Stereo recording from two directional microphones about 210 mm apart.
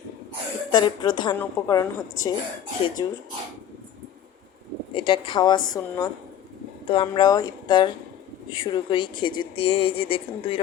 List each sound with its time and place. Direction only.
0.7 s a woman's voice: 20° left (ahead or behind)
4.9 s a woman's voice: 25° left (ahead or behind)